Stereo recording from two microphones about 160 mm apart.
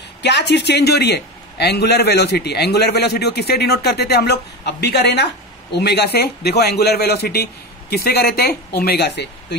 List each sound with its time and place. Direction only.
0.2 s a man's voice: 90° left